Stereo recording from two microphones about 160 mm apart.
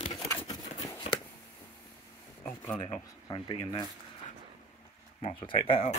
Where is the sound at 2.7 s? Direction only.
35° left (ahead or behind).